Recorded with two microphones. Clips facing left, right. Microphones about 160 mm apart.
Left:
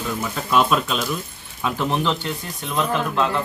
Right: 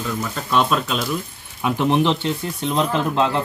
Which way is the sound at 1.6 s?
20° right (ahead or behind).